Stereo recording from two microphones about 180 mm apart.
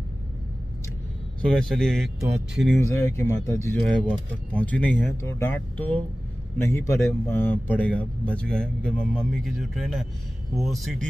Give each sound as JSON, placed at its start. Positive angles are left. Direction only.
{"t": 1.4, "sound": "speech", "side_deg": 5}
{"t": 2.9, "sound": "a man's voice", "side_deg": 15}